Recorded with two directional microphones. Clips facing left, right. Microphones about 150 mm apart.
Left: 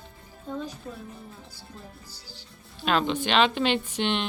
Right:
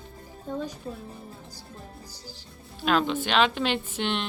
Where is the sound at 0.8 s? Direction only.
30° right (ahead or behind).